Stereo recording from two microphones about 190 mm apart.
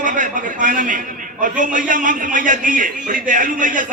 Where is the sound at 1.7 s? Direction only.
45° right (ahead or behind).